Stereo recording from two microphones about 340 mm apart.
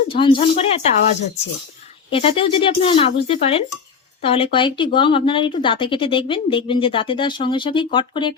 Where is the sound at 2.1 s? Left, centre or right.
Centre.